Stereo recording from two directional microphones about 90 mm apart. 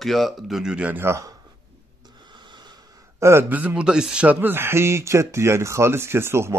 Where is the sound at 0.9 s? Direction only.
30° right (ahead or behind).